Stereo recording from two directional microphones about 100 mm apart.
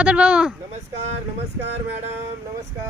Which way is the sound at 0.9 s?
90° right.